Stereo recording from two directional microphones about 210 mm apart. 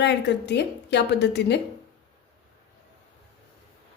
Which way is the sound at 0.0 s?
55° left (ahead or behind).